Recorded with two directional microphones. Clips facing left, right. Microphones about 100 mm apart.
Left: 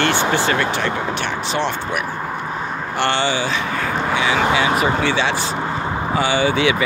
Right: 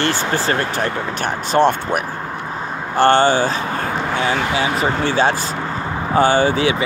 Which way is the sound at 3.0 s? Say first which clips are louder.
Right 7 dB; 45° right (ahead or behind).